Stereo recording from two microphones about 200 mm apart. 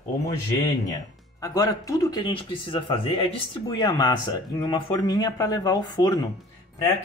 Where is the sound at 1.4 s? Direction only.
20° left (ahead or behind).